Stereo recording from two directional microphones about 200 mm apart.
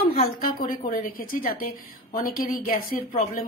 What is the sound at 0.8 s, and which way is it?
Speech, 40° left (ahead or behind).